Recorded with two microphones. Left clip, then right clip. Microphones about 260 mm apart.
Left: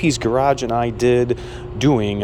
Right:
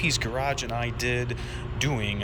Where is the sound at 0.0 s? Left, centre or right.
Left.